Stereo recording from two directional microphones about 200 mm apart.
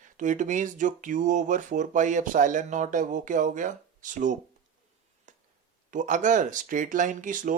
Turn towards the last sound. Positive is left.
turn(degrees=-40)  # may be behind; listen again after turning